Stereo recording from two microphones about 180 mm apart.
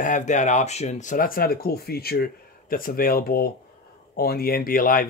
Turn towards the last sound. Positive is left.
turn(degrees=50)  # may be behind; listen again after turning